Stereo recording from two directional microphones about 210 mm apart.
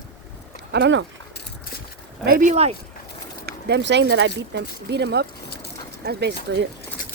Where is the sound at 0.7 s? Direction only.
55° right (ahead or behind).